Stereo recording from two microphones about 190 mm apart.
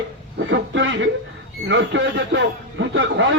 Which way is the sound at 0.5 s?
80° right.